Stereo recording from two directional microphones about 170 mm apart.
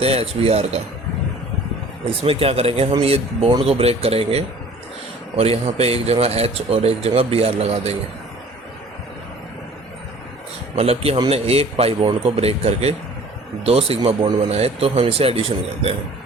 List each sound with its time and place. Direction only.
0.0 s speech: 35° right (ahead or behind)
2.0 s speech: 35° right (ahead or behind)
10.8 s speech: 35° right (ahead or behind)